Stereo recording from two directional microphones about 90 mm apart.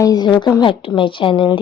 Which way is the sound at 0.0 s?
45° left (ahead or behind).